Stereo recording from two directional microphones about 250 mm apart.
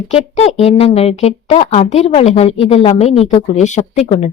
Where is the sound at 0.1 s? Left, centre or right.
Left.